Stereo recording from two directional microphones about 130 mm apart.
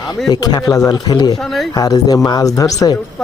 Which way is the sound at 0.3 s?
30° left (ahead or behind).